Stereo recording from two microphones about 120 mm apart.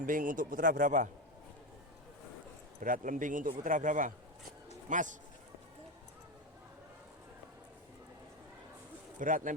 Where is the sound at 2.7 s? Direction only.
90° right.